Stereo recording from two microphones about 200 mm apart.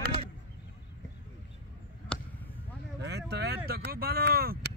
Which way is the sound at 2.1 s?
5° left (ahead or behind).